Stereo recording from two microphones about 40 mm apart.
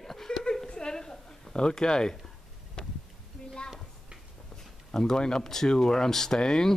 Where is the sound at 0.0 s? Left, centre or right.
Centre.